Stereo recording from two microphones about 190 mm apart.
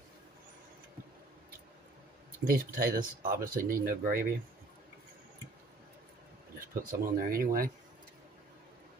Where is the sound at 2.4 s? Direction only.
50° right (ahead or behind).